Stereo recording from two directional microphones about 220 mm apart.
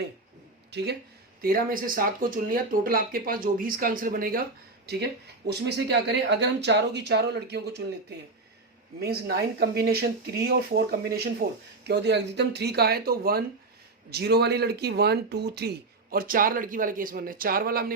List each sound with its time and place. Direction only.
0.7 s speech: 50° right (ahead or behind)
5.5 s speech: 50° right (ahead or behind)
9.0 s speech: 45° right (ahead or behind)